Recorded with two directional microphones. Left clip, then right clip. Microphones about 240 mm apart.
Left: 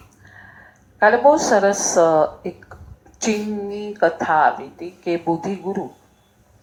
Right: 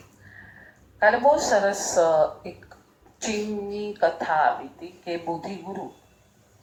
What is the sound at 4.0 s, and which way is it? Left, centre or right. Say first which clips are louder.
Speech: left 6 dB; left.